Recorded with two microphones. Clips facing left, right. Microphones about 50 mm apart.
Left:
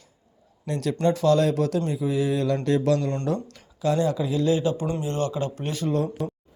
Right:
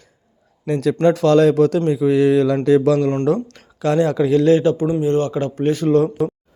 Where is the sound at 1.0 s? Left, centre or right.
Right.